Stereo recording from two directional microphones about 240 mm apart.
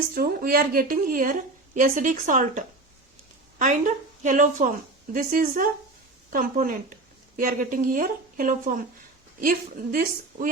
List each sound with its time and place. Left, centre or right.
0.1 s a woman's voice: right